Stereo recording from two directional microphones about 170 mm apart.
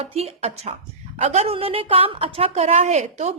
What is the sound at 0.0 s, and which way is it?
A woman's voice, 35° right (ahead or behind).